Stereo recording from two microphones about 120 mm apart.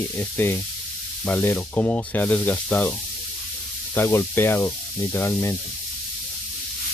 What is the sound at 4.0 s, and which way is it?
Rub, 20° left (ahead or behind).